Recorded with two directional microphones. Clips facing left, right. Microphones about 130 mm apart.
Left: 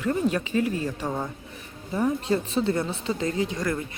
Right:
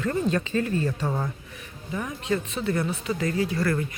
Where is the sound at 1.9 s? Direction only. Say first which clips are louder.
Left 4 dB; 30° left (ahead or behind).